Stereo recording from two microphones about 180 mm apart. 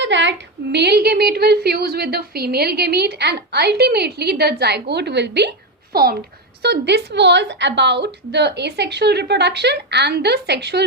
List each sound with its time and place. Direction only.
0.0 s a woman's voice: 85° right; by 6.1 s 55° right (ahead or behind)
6.6 s a woman's voice: 70° right (ahead or behind)